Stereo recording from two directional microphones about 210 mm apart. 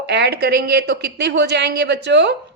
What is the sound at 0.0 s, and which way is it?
Speech, 55° right (ahead or behind).